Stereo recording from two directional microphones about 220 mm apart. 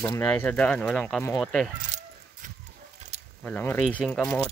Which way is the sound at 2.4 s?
35° right (ahead or behind).